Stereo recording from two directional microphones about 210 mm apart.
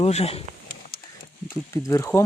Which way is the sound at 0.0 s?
30° left (ahead or behind).